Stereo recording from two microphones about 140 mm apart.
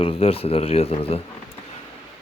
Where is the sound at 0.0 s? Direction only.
45° left (ahead or behind).